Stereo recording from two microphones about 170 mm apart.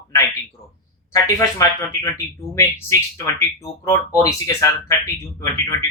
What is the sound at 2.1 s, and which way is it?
Speech, 15° left (ahead or behind).